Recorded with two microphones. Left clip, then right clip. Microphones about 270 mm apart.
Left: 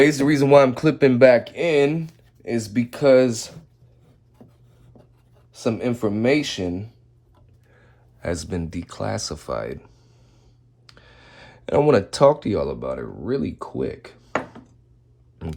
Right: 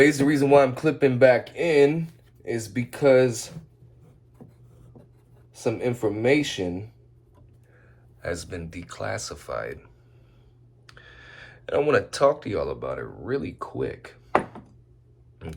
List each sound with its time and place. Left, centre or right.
0.0 s speech: left
5.5 s speech: left
8.2 s speech: left
10.8 s speech: centre
15.4 s pig: centre